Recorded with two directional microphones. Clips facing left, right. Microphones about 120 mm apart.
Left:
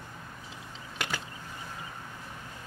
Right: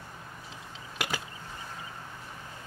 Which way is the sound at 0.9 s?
5° right (ahead or behind).